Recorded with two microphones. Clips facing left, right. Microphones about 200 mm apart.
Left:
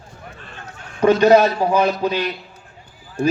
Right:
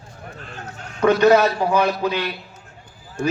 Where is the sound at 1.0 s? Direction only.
25° left (ahead or behind).